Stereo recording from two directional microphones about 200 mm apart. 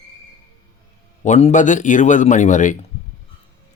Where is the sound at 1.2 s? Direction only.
35° left (ahead or behind).